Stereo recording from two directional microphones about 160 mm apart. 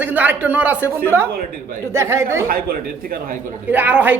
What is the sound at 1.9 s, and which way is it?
Speech, 15° right (ahead or behind).